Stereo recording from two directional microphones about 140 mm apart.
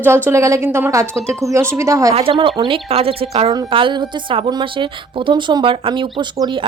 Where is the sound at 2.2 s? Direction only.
40° right (ahead or behind).